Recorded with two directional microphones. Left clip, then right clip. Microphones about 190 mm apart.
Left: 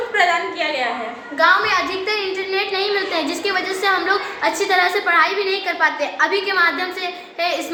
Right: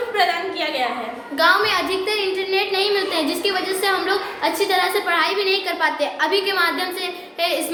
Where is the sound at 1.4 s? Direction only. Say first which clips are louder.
Left 2 dB; 40° right (ahead or behind).